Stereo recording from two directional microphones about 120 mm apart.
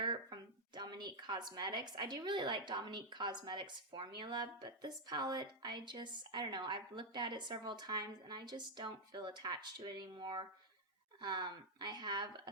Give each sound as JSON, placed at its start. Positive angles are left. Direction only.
{"t": 0.0, "sound": "a woman's voice", "side_deg": -40}